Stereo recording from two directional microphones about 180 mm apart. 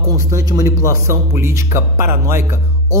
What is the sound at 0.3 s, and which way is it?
Speech, 20° right (ahead or behind).